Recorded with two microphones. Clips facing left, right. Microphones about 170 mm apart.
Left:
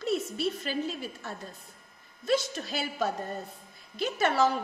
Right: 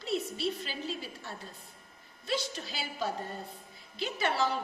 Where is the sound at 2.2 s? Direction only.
50° left (ahead or behind).